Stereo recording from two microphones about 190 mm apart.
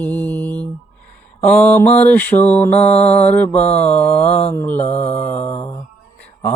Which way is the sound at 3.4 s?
5° left (ahead or behind).